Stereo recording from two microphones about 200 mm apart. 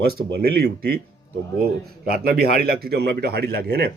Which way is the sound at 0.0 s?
50° right (ahead or behind).